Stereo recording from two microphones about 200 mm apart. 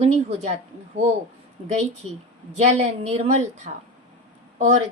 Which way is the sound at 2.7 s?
35° right (ahead or behind).